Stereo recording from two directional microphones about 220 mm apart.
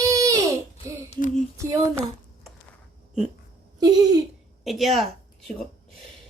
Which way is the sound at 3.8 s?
20° right (ahead or behind).